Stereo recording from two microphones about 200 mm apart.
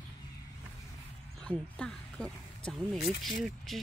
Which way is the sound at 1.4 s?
5° left (ahead or behind).